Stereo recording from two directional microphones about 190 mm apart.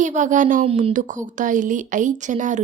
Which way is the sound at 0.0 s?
40° right (ahead or behind).